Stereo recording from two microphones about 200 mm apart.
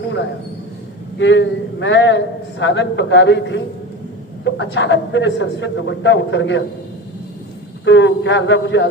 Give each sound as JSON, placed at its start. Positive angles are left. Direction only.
{"t": 1.2, "sound": "a man's voice", "side_deg": 65}
{"t": 7.9, "sound": "a man's voice", "side_deg": 65}